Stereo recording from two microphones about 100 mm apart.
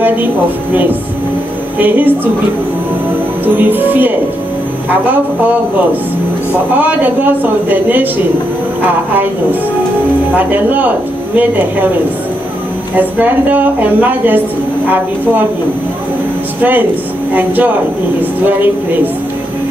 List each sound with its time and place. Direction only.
1.8 s a woman's voice: 20° right (ahead or behind)
3.4 s a woman's voice: 20° right (ahead or behind)
6.8 s a woman's voice: 20° right (ahead or behind)
12.9 s a woman's voice: 15° right (ahead or behind)
17.3 s a woman's voice: 20° right (ahead or behind)